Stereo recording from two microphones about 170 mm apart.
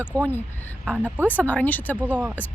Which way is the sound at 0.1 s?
20° right (ahead or behind).